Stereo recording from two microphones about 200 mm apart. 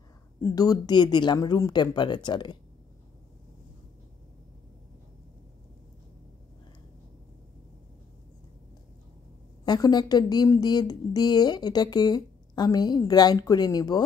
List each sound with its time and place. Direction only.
0.4 s a woman's voice: 20° left (ahead or behind)
9.7 s a woman's voice: 20° left (ahead or behind)